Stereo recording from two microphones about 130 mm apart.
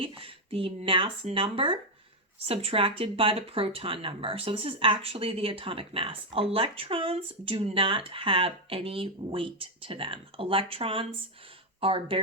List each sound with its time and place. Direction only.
0.0 s speech: 45° right (ahead or behind)